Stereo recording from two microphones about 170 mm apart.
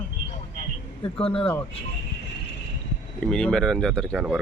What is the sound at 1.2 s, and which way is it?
Speech, 35° left (ahead or behind).